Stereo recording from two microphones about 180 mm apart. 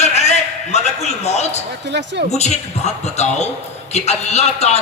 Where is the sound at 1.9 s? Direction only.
75° right (ahead or behind).